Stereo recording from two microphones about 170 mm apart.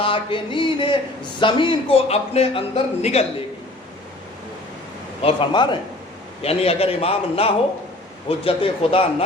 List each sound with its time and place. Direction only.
0.0 s a sound: 30° left (ahead or behind)
1.4 s a man's voice: 30° left (ahead or behind)
5.2 s a man's voice: 30° left (ahead or behind)